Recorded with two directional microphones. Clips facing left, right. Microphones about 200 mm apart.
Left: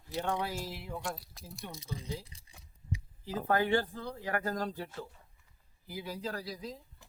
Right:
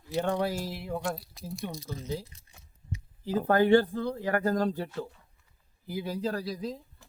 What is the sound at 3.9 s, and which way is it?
Speech, 60° right (ahead or behind).